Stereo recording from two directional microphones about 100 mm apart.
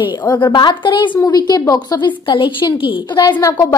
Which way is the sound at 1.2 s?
40° left (ahead or behind).